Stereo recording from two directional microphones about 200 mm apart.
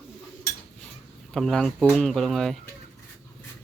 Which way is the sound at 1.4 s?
Centre (ahead or behind).